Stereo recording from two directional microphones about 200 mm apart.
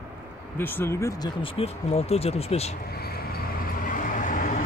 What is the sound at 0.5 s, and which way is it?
Speech, 10° left (ahead or behind).